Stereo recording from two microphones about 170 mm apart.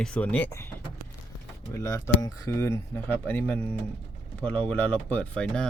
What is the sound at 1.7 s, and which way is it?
Speech, 20° left (ahead or behind).